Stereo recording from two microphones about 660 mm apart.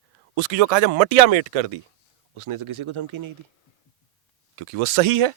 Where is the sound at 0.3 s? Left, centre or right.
Right.